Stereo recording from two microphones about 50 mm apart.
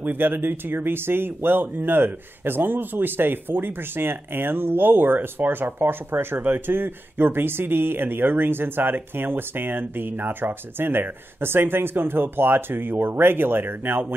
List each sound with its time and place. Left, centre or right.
0.0 s speech: right